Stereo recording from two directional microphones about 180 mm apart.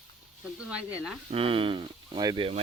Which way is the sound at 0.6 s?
5° right (ahead or behind).